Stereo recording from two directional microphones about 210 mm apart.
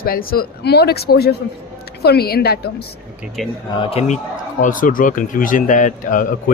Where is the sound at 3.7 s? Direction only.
25° left (ahead or behind).